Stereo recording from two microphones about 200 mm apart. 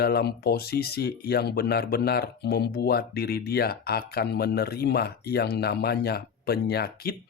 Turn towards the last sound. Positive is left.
turn(degrees=50)  # may be behind; listen again after turning